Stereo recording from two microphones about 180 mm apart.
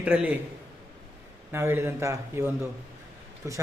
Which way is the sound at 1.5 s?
15° right (ahead or behind).